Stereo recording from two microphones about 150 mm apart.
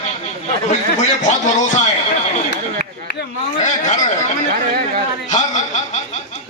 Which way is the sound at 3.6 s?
55° left (ahead or behind).